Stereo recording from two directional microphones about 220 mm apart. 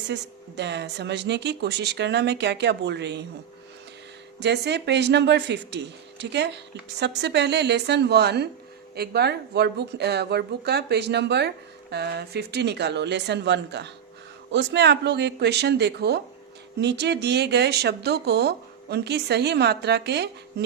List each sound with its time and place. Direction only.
0.1 s speech: 50° right (ahead or behind)
4.4 s speech: 50° right (ahead or behind)